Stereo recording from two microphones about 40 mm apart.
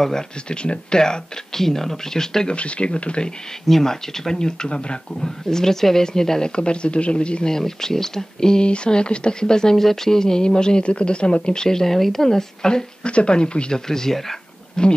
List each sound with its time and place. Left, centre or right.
0.5 s speech: left
2.5 s speech: left
3.6 s speech: centre
6.5 s speech: left
7.5 s speech: centre
13.7 s speech: centre